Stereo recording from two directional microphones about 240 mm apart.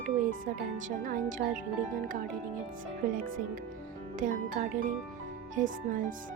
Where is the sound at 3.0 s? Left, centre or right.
Right.